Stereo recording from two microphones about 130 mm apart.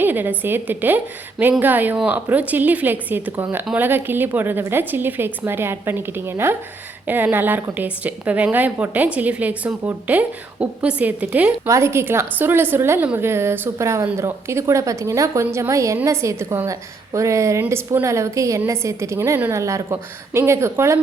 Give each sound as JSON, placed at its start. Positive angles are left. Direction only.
{"t": 0.0, "sound": "a woman's voice", "side_deg": -15}